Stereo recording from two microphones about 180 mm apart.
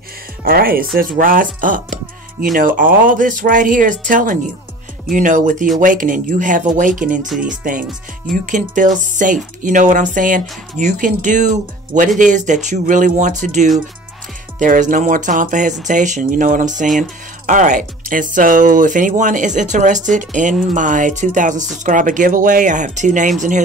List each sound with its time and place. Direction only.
0.4 s speech: 55° right (ahead or behind)
7.2 s speech: 5° right (ahead or behind)
8.5 s speech: 45° right (ahead or behind)